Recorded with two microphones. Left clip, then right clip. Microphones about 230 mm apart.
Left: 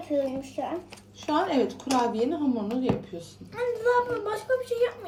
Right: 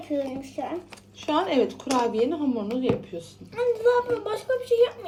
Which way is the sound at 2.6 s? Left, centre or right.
Centre.